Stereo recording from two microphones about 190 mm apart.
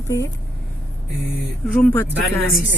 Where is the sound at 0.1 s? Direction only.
15° left (ahead or behind).